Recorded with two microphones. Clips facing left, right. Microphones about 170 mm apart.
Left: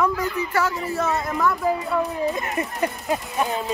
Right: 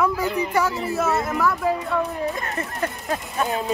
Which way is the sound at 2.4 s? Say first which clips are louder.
Left 2 dB; 15° left (ahead or behind).